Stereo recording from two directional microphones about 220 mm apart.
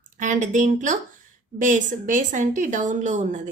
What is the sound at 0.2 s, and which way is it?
Speech, 35° right (ahead or behind).